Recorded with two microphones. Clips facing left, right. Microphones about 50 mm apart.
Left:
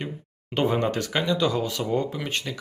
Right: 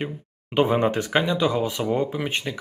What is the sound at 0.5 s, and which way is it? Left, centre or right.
Speech, centre.